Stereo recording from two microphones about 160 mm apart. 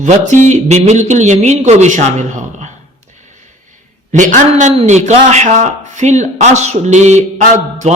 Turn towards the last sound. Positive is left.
turn(degrees=-45)  # may be behind; listen again after turning